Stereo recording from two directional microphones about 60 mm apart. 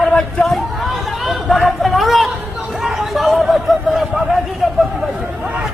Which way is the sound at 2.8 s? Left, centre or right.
Centre.